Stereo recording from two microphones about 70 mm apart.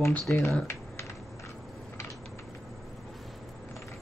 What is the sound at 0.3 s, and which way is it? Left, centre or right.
Speech, left.